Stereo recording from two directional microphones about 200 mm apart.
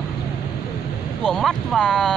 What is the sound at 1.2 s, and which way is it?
Speech, centre (ahead or behind).